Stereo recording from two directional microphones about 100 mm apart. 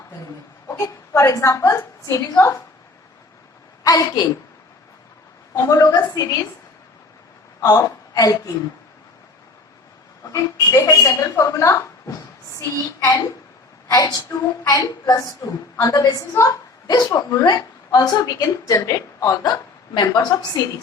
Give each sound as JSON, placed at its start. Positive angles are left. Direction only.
{"t": 0.7, "sound": "whimper", "side_deg": 30}
{"t": 1.4, "sound": "a woman's voice", "side_deg": 30}
{"t": 3.8, "sound": "a woman's voice", "side_deg": 35}
{"t": 5.5, "sound": "a woman's voice", "side_deg": 35}
{"t": 7.6, "sound": "a woman's voice", "side_deg": 40}
{"t": 10.3, "sound": "a woman's voice", "side_deg": 35}